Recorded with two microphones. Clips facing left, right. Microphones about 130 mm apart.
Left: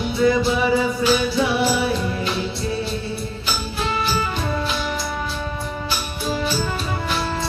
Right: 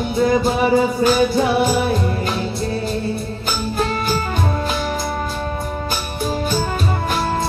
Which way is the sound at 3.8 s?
45° right (ahead or behind).